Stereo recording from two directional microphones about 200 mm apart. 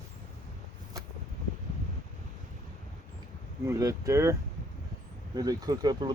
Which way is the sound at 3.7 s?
15° right (ahead or behind).